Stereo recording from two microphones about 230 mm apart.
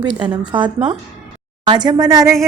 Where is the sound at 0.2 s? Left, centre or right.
Centre.